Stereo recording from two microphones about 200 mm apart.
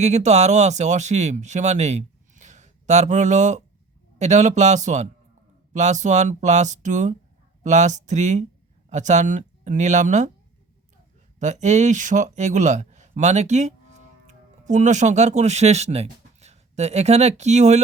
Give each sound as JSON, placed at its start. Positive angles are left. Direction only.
{"t": 0.0, "sound": "speech", "side_deg": -35}
{"t": 11.3, "sound": "speech", "side_deg": -35}